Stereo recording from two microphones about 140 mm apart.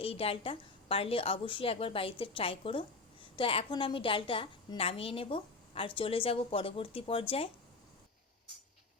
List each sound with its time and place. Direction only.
0.0 s a woman's voice: 45° left (ahead or behind)